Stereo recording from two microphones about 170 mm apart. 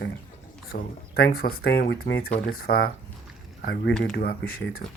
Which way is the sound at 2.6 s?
65° left (ahead or behind).